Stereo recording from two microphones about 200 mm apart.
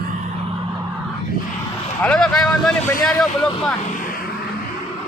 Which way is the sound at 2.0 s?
5° left (ahead or behind).